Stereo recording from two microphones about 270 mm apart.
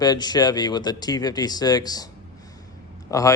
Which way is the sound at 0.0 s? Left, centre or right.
Centre.